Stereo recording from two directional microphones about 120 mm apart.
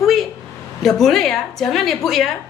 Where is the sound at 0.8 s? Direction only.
Centre (ahead or behind).